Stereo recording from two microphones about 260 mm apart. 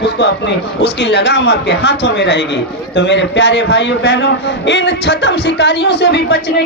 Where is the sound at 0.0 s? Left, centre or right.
Left.